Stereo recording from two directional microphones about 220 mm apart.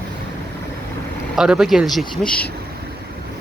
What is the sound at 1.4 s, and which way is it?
Speech, centre (ahead or behind).